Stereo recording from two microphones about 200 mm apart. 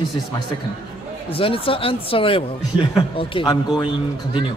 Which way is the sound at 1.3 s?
25° left (ahead or behind).